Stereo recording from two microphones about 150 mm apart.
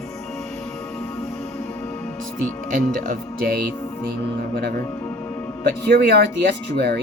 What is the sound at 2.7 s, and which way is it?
Speech, 65° right (ahead or behind).